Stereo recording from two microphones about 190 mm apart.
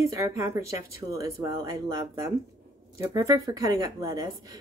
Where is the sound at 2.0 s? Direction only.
20° right (ahead or behind).